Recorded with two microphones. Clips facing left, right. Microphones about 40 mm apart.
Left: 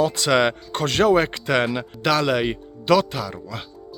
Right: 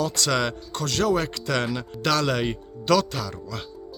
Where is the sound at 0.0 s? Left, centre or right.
Left.